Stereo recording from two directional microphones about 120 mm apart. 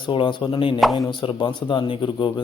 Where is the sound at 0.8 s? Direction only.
Centre (ahead or behind).